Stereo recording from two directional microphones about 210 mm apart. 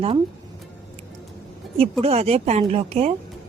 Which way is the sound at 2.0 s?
30° right (ahead or behind).